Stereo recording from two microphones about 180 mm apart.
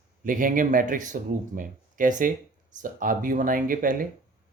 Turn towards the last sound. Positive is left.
turn(degrees=-50)  # may be behind; listen again after turning